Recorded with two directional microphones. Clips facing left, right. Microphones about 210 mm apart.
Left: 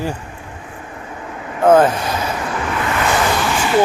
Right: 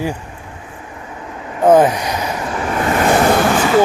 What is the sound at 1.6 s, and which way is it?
Speech, 15° right (ahead or behind).